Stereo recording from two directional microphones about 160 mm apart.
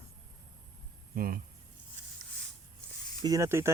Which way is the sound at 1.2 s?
70° right (ahead or behind).